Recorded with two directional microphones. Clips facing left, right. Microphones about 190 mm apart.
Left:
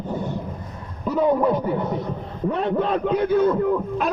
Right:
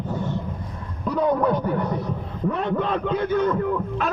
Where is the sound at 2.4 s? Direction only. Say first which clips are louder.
Left 2 dB; 25° left (ahead or behind).